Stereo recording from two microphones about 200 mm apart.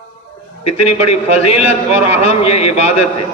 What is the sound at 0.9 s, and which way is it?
A man's voice, 30° left (ahead or behind).